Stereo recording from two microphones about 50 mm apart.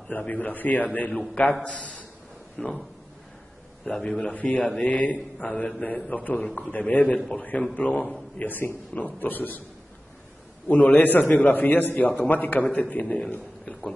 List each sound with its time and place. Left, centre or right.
0.3 s a man's voice: left
2.6 s a man's voice: centre
3.8 s a man's voice: centre
7.2 s a man's voice: centre
8.4 s a man's voice: left
10.7 s a man's voice: left